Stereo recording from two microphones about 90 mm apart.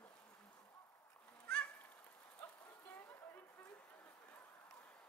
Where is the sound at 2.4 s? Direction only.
20° left (ahead or behind).